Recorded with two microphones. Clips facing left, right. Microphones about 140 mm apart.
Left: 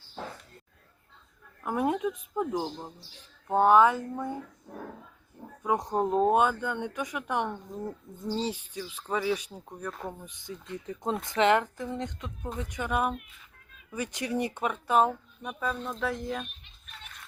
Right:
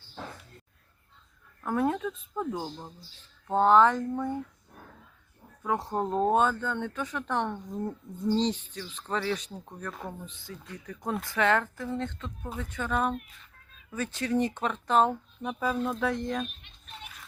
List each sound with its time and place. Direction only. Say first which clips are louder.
1.6 s speech: even; 15° left (ahead or behind)
5.6 s speech: left 2 dB; 15° left (ahead or behind)
15.4 s speech: right 4 dB; 5° right (ahead or behind)
17.0 s a sound: right 1 dB; 5° right (ahead or behind)